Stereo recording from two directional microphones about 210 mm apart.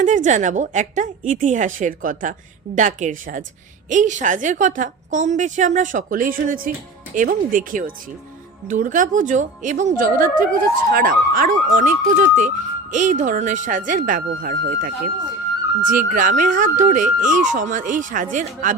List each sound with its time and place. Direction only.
0.0 s a woman's voice: 35° right (ahead or behind)